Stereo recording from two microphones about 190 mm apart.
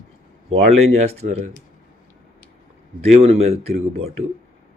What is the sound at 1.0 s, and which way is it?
Speech, 35° right (ahead or behind).